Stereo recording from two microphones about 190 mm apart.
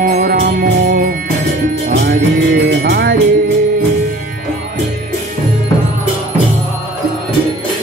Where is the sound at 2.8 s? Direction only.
60° right (ahead or behind).